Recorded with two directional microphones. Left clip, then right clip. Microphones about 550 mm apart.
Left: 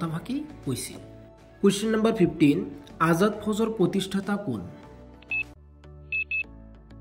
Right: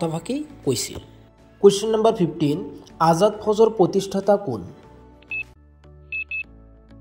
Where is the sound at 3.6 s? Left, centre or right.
Centre.